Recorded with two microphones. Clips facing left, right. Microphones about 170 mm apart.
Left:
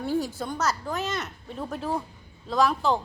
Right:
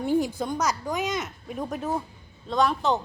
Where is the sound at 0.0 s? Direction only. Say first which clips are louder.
Right 3 dB; 15° right (ahead or behind).